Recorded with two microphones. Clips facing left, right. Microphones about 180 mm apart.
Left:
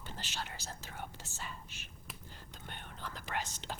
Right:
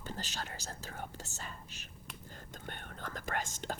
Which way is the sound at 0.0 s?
40° right (ahead or behind).